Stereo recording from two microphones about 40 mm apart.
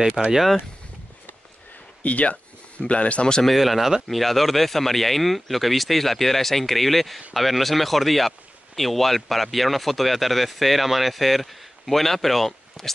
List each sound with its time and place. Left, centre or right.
0.2 s speech: centre
2.0 s speech: left
3.4 s speech: centre